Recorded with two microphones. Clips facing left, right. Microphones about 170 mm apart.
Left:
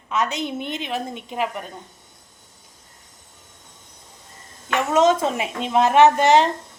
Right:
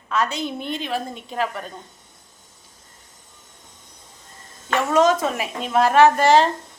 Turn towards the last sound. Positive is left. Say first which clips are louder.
# even
turn(degrees=20)  # may be behind; listen again after turning